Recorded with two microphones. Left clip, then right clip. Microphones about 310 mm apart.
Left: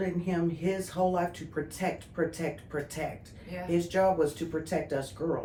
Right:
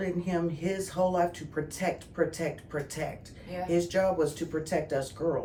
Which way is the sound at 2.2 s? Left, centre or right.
Centre.